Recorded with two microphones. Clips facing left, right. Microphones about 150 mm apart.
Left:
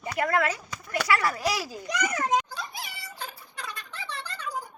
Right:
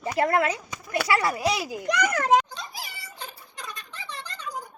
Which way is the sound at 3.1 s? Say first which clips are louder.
Left 2 dB; 20° right (ahead or behind).